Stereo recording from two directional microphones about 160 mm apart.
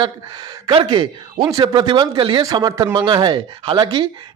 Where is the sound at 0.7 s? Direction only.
30° right (ahead or behind).